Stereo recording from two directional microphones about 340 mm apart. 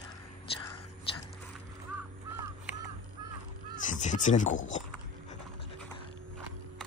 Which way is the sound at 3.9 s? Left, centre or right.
Left.